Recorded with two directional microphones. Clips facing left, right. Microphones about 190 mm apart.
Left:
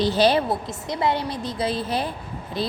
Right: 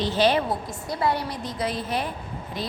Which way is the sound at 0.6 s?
20° left (ahead or behind).